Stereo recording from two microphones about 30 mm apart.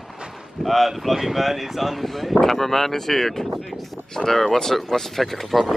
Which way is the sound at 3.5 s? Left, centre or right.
Centre.